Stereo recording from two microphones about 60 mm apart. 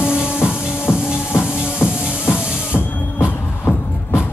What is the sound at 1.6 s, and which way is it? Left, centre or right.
Music, left.